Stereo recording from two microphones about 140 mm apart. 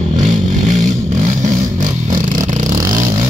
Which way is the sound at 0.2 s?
60° right (ahead or behind).